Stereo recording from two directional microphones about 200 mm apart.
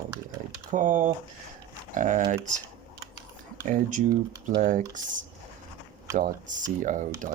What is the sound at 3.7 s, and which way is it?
Speech, 40° right (ahead or behind).